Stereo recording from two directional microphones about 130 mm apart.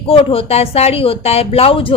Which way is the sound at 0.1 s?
45° left (ahead or behind).